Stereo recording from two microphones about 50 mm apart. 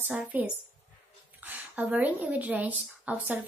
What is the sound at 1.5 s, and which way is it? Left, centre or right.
Speech, right.